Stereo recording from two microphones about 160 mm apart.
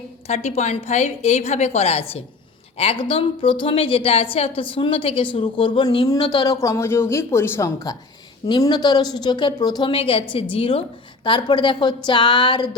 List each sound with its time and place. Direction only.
0.3 s a woman's voice: 45° left (ahead or behind); by 7.9 s 15° left (ahead or behind)
8.4 s a woman's voice: 30° left (ahead or behind)